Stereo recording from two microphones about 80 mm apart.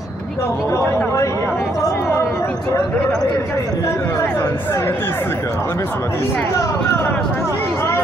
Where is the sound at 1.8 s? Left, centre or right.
Left.